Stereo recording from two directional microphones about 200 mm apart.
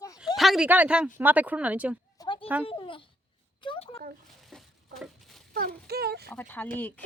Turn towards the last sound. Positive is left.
turn(degrees=10)  # may be behind; listen again after turning